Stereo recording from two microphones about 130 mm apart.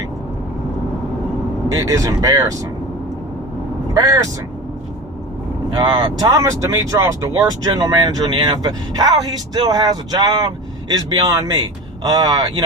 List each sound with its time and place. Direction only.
1.7 s speech: 25° right (ahead or behind)
3.9 s speech: 25° right (ahead or behind)
5.7 s speech: 30° right (ahead or behind)